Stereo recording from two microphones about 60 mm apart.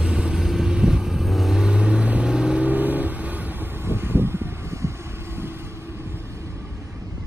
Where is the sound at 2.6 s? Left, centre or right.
Right.